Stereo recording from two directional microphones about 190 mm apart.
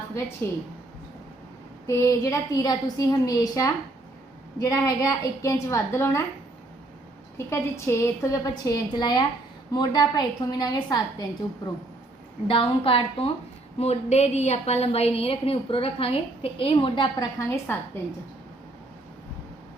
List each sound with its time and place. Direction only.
0.4 s a woman's voice: 10° left (ahead or behind)
1.9 s a woman's voice: 15° left (ahead or behind)
7.3 s a woman's voice: 15° left (ahead or behind)